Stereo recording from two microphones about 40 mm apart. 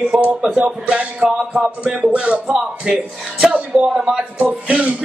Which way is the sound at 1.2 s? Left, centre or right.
Centre.